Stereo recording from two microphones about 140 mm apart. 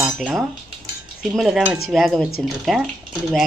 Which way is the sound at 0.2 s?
Centre (ahead or behind).